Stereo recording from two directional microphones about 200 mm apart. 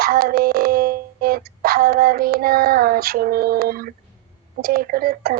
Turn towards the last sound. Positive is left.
turn(degrees=-50)  # may be behind; listen again after turning